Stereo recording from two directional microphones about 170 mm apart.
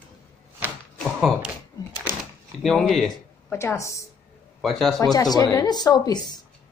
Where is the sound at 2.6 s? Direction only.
Centre (ahead or behind).